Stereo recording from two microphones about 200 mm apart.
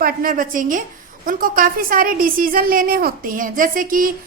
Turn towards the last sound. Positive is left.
turn(degrees=-45)  # may be behind; listen again after turning